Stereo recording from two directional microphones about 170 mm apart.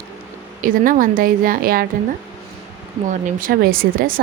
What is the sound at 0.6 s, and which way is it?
A woman's voice, 55° right (ahead or behind).